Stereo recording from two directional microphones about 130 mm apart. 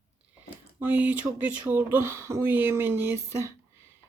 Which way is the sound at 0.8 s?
15° right (ahead or behind).